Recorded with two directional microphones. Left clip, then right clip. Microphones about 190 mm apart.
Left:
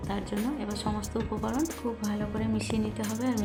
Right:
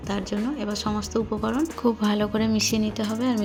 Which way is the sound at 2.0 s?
40° right (ahead or behind).